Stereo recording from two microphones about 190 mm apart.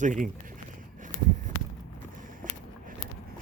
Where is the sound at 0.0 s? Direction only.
40° right (ahead or behind).